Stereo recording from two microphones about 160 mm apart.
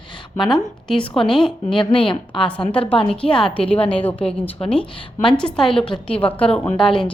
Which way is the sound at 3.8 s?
35° left (ahead or behind).